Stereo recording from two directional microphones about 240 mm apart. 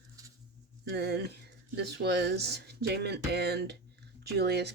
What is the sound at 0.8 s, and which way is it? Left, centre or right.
Speech, right.